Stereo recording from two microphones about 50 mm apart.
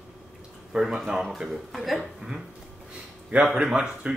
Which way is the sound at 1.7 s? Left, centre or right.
Centre.